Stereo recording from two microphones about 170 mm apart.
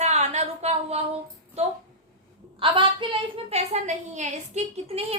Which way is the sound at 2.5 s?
30° right (ahead or behind).